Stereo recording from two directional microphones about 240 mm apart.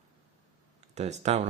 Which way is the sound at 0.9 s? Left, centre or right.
Right.